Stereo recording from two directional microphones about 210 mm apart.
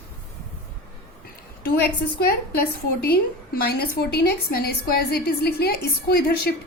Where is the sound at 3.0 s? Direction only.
45° left (ahead or behind).